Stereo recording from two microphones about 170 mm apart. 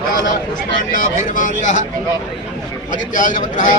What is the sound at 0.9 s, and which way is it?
Speech, 50° left (ahead or behind).